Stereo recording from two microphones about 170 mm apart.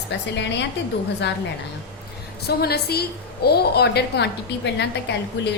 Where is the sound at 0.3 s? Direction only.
90° left.